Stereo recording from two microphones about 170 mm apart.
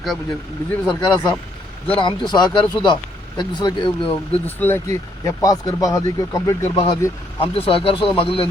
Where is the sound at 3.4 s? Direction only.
25° left (ahead or behind).